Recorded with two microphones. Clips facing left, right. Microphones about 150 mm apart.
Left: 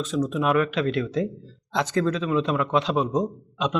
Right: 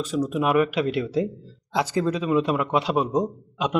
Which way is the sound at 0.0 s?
10° right (ahead or behind).